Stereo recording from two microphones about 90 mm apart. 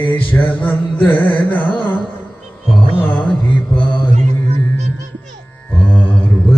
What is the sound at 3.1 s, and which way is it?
Mantra, 10° left (ahead or behind).